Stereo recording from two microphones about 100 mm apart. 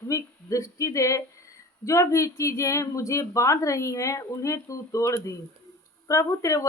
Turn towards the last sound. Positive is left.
turn(degrees=30)  # may be behind; listen again after turning